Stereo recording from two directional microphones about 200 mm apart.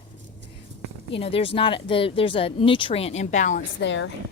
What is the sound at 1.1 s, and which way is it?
Speech, 30° left (ahead or behind).